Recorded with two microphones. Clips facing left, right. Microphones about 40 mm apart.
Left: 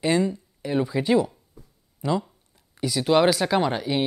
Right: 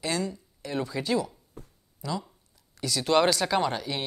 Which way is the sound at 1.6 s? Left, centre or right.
Right.